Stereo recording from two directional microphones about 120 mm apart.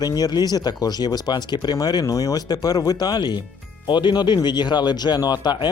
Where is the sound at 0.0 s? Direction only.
35° left (ahead or behind).